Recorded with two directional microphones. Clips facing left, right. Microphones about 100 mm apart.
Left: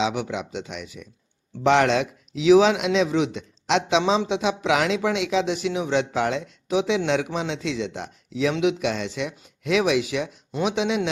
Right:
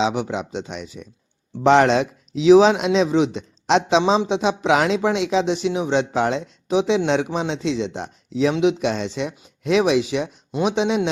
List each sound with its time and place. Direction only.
0.0 s speech: 30° right (ahead or behind)